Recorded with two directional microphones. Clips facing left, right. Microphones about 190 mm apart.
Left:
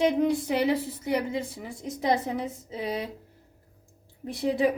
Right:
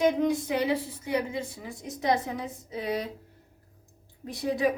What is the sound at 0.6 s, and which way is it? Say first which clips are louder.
Speech: left 2 dB; 35° left (ahead or behind).